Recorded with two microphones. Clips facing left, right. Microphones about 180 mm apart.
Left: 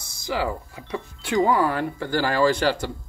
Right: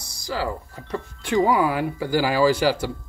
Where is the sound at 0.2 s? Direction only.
20° left (ahead or behind).